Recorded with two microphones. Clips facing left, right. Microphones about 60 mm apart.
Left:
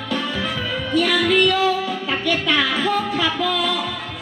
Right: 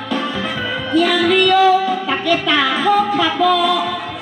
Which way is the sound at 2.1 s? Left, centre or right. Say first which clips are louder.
Right 2 dB; right.